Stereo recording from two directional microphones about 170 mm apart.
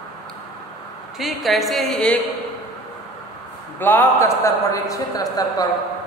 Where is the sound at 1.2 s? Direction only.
Centre (ahead or behind).